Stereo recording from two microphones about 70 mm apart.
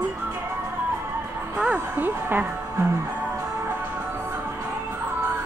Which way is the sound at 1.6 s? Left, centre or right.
Centre.